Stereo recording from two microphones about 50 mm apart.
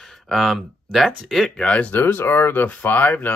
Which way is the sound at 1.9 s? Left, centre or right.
Left.